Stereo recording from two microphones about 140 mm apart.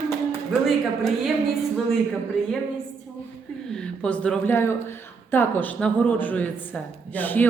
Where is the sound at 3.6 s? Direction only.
5° left (ahead or behind).